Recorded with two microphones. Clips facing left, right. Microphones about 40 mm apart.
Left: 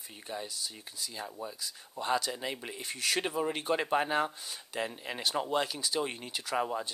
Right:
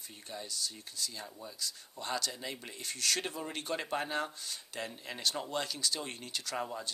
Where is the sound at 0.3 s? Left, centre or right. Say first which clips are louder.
Left 2 dB; centre.